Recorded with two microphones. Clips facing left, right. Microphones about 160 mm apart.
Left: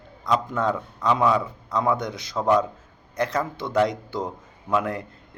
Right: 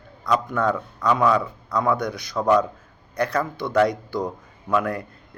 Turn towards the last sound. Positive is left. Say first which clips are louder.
# right 1 dB
turn(degrees=20)  # may be behind; listen again after turning